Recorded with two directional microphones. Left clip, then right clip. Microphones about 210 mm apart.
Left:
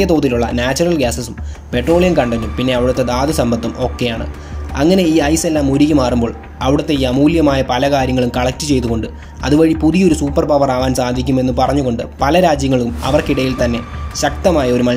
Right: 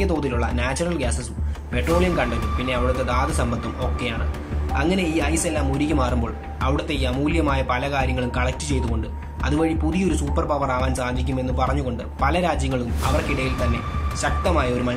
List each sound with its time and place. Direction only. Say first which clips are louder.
0.0 s speech: left 10 dB; 20° left (ahead or behind)